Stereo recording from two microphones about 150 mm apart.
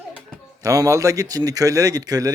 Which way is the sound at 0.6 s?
20° right (ahead or behind).